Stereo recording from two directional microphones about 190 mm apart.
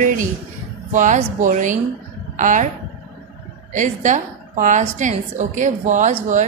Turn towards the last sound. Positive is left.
turn(degrees=-40)  # may be behind; listen again after turning